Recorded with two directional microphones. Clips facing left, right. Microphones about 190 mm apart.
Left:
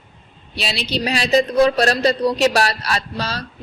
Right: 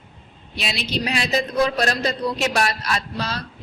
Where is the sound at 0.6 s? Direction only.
30° left (ahead or behind).